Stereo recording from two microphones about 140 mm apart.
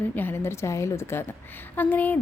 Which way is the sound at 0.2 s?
15° left (ahead or behind).